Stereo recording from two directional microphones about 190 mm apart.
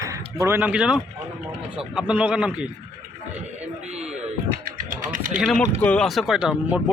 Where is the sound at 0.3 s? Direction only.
10° right (ahead or behind).